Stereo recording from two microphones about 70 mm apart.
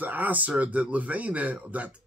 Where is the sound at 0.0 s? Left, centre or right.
Right.